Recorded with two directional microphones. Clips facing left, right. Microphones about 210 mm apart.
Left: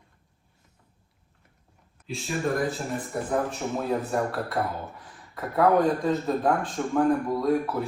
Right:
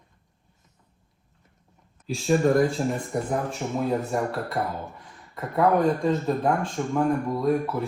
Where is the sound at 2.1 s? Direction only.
40° right (ahead or behind).